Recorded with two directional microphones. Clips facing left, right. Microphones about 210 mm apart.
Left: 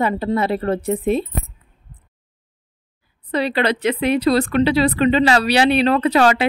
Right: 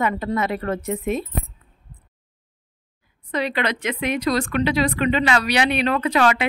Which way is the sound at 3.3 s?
30° left (ahead or behind).